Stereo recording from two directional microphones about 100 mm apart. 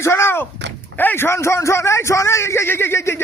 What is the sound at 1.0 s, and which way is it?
A man's voice, 20° left (ahead or behind).